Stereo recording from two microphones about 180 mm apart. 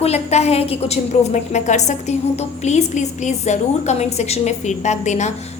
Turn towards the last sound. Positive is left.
turn(degrees=40)  # may be behind; listen again after turning